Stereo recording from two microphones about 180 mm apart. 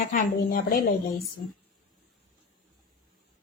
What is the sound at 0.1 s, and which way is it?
Speech, 50° left (ahead or behind).